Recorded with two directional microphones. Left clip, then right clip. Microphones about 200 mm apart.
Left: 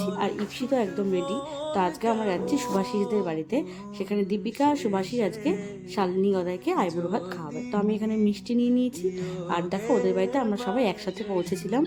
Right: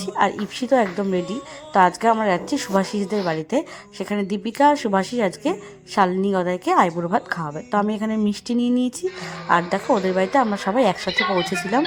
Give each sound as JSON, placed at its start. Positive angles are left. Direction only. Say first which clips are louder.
{"t": 0.0, "sound": "a woman's voice", "louder": "right 7 dB", "side_deg": -20}
{"t": 11.2, "sound": "speech", "louder": "right 10 dB", "side_deg": -50}